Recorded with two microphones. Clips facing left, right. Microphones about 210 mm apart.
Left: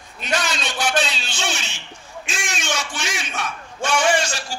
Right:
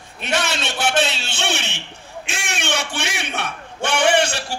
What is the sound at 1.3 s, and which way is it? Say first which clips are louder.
A man's voice: right 3 dB; 60° right (ahead or behind).